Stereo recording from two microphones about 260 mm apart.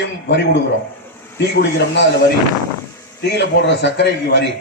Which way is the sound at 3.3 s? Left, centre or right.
Left.